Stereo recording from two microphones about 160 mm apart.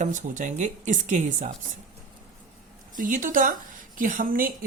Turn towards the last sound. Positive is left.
turn(degrees=-60)  # may be behind; listen again after turning